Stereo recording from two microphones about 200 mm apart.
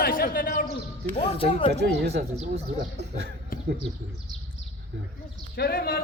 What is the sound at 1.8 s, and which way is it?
Speech, 55° right (ahead or behind).